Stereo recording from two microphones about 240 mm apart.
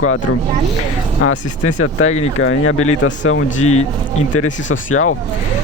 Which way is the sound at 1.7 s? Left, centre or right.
Left.